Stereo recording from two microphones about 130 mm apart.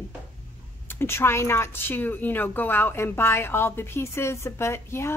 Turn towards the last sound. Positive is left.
turn(degrees=20)  # may be behind; listen again after turning